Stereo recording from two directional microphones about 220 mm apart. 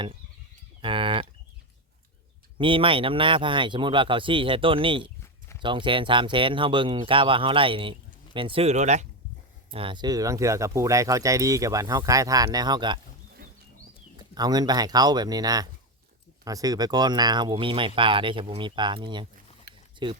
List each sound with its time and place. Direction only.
0.8 s livestock: 25° right (ahead or behind)
2.6 s speech: 25° right (ahead or behind)
14.2 s speech: 20° right (ahead or behind)
19.7 s a sound: 45° right (ahead or behind)